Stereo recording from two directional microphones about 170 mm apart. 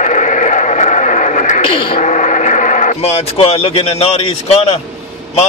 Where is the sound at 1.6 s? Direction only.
30° left (ahead or behind).